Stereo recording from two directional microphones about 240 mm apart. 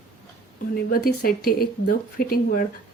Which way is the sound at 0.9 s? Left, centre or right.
Left.